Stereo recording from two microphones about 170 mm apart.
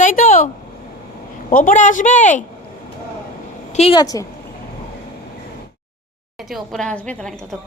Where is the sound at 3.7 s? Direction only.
40° left (ahead or behind).